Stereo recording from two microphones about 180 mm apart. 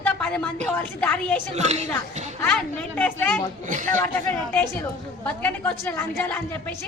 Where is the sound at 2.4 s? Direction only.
10° left (ahead or behind).